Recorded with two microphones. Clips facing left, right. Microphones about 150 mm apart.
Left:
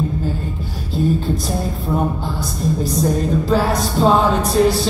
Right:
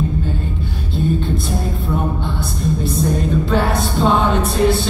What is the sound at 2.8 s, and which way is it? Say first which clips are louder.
Speech: left 2 dB; 40° left (ahead or behind).